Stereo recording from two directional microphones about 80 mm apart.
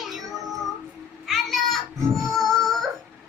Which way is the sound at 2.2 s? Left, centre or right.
Centre.